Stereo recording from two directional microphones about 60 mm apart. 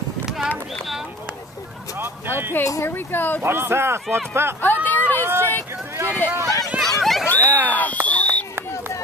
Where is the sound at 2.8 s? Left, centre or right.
Left.